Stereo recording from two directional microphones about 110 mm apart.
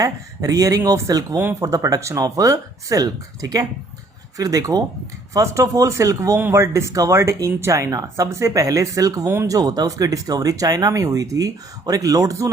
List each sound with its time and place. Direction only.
0.0 s speech: 30° right (ahead or behind)